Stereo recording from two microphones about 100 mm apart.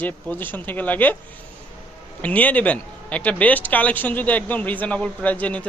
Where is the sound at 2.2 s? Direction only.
15° left (ahead or behind).